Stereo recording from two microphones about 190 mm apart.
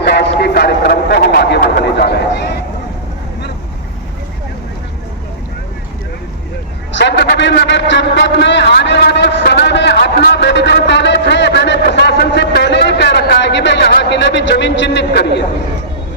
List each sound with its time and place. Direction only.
0.0 s a man's voice: 60° left (ahead or behind)
6.9 s a man's voice: 65° left (ahead or behind)